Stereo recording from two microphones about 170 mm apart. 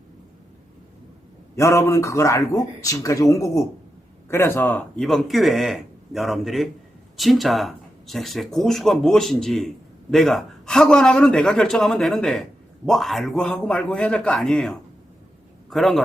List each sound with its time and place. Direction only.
1.5 s a man's voice: 15° left (ahead or behind); by 16.0 s centre (ahead or behind)